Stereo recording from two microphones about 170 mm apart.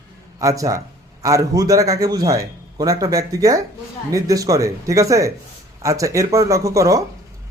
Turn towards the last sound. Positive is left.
turn(degrees=-20)  # may be behind; listen again after turning